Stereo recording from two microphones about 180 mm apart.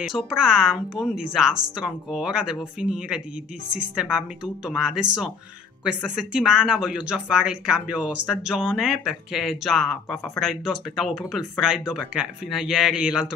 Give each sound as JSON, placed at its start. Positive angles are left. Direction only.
{"t": 0.3, "sound": "speech", "side_deg": 0}